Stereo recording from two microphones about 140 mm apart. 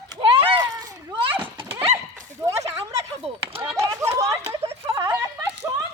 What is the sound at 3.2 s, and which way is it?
Speech, 45° right (ahead or behind).